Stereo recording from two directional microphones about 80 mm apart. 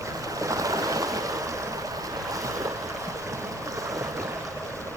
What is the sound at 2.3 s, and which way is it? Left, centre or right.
Boat, right.